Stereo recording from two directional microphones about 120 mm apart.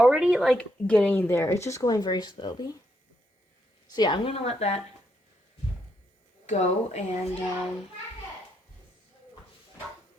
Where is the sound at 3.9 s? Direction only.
35° left (ahead or behind).